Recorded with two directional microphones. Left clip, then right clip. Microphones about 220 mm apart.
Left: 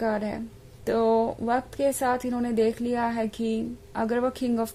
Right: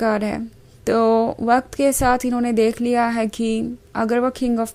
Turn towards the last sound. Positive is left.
turn(degrees=-20)  # may be behind; listen again after turning